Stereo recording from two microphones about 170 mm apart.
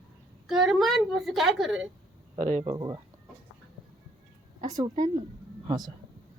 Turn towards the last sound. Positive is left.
turn(degrees=-25)  # may be behind; listen again after turning